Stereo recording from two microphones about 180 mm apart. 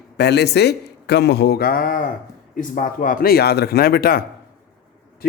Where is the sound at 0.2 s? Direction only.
65° left (ahead or behind).